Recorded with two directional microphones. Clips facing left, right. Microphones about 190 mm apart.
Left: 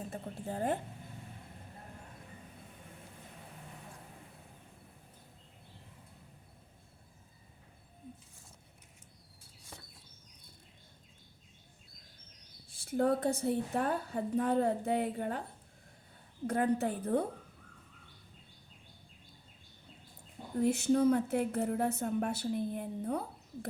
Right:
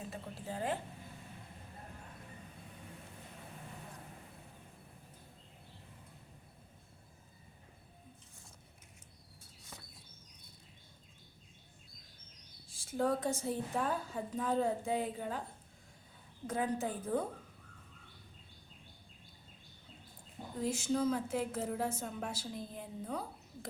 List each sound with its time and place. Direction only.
0.4 s a sound: 45° left (ahead or behind)
12.7 s a woman's voice: 60° left (ahead or behind)
16.5 s a woman's voice: 60° left (ahead or behind)
20.6 s a woman's voice: 60° left (ahead or behind)